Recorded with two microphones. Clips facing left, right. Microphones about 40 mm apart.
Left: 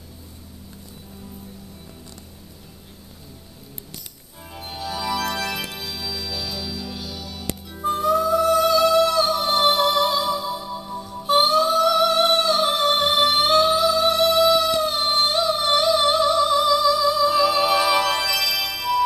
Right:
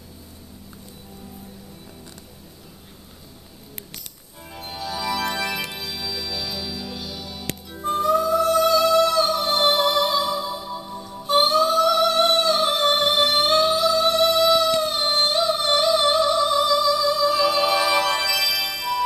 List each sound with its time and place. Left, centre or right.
4.5 s music: centre